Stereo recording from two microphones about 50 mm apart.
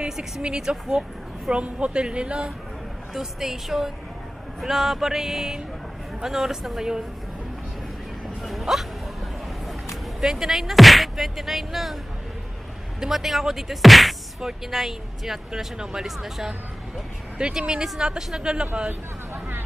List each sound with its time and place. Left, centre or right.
0.4 s speech: centre
3.2 s speech: centre
8.4 s hiccup: centre
10.2 s speech: centre
13.0 s speech: centre
18.9 s hubbub: right